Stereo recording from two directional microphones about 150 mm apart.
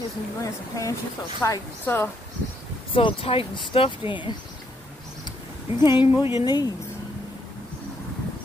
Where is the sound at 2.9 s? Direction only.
35° left (ahead or behind).